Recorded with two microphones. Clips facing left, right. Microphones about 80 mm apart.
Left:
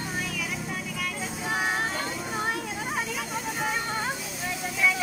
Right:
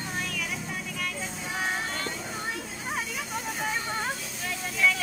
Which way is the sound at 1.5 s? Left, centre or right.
Centre.